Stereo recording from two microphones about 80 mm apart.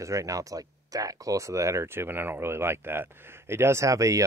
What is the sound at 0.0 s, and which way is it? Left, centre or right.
Speech, right.